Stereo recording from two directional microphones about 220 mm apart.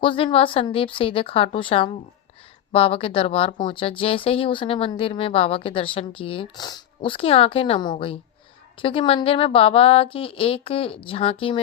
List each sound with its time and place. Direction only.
0.0 s a woman's voice: 25° left (ahead or behind)